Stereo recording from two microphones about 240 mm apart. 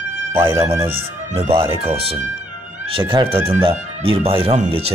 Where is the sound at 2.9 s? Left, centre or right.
Right.